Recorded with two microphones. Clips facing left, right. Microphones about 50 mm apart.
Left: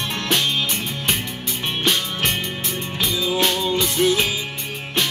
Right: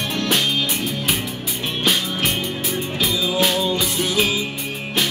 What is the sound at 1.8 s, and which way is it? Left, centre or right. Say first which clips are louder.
Music: right 1 dB; centre.